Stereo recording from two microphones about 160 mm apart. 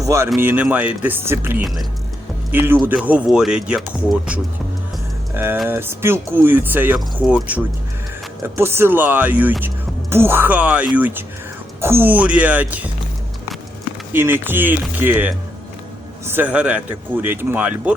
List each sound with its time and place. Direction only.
0.0 s speech: 20° right (ahead or behind); by 3.8 s 5° right (ahead or behind)
5.6 s speech: 15° right (ahead or behind)
14.1 s speech: 15° right (ahead or behind)